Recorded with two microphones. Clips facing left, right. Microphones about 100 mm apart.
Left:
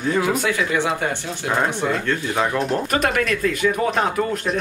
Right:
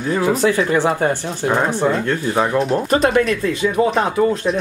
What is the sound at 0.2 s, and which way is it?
Speech, 35° right (ahead or behind).